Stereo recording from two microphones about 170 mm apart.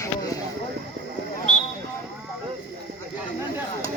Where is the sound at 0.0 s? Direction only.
20° left (ahead or behind).